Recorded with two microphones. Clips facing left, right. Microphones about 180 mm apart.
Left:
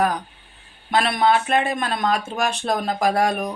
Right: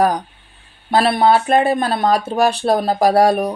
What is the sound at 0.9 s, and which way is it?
Speech, 35° right (ahead or behind).